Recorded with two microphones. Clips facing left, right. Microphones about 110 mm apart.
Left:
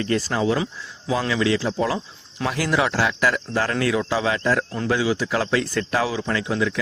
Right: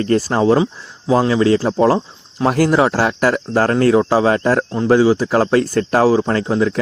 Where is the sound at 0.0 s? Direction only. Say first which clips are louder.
Right 7 dB; 40° right (ahead or behind).